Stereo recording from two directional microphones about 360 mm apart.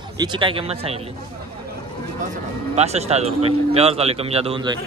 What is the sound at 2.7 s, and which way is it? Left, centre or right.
Speech, centre.